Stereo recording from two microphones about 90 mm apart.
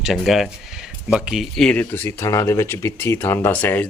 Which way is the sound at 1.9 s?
30° left (ahead or behind).